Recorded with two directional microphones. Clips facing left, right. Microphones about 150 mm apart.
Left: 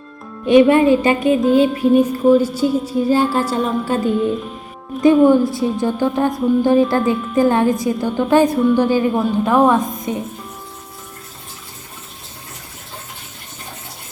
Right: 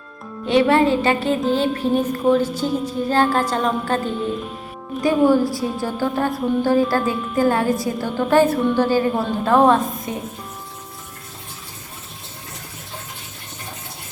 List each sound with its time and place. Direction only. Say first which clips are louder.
0.4 s music: left 5 dB; 15° left (ahead or behind)
4.9 s music: left 5 dB; 20° left (ahead or behind)